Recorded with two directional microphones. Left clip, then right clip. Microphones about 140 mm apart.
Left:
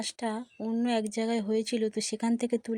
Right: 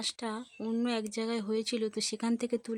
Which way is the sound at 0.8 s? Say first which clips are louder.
Left 6 dB; 10° left (ahead or behind).